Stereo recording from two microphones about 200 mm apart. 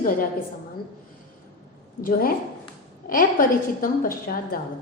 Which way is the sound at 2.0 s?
45° left (ahead or behind).